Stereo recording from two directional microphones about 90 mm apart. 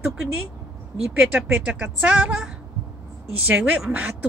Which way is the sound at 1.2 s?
20° right (ahead or behind).